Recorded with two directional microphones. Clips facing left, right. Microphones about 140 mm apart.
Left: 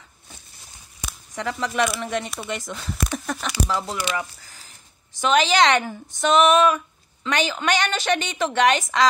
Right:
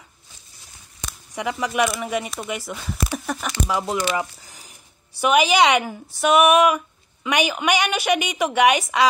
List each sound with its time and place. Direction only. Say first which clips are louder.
1.3 s speech: right 2 dB; 15° right (ahead or behind)
3.6 s speech: right 4 dB; 15° right (ahead or behind)